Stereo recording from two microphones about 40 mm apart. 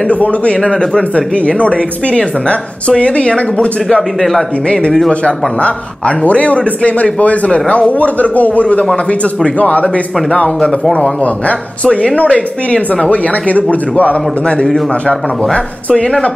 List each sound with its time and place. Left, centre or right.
0.1 s a man's voice: left
0.6 s speech: left
4.2 s speech: centre
5.2 s a man's voice: left
13.1 s a man's voice: left
15.5 s speech: left